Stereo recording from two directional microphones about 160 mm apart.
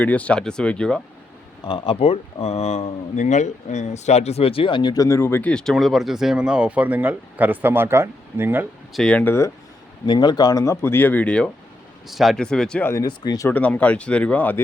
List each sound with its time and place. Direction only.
0.0 s speech: 10° left (ahead or behind)
1.6 s speech: 30° left (ahead or behind); by 8.6 s 15° right (ahead or behind)
8.9 s speech: 5° left (ahead or behind)
10.1 s speech: 25° left (ahead or behind); by 12.9 s 5° left (ahead or behind)
12.9 s speech: 25° left (ahead or behind)
13.5 s speech: 10° left (ahead or behind)